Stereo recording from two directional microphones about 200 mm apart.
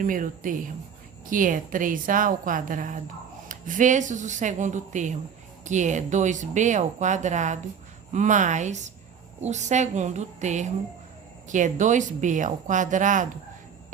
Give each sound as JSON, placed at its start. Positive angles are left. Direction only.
{"t": 0.0, "sound": "a woman's voice", "side_deg": -40}